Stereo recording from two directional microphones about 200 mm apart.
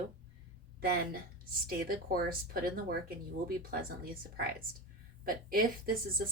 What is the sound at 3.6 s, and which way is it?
Speech, 45° right (ahead or behind).